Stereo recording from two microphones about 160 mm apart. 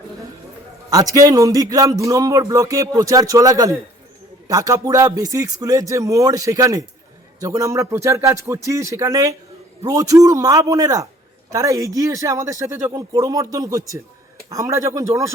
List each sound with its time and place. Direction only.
0.9 s speech: 20° right (ahead or behind)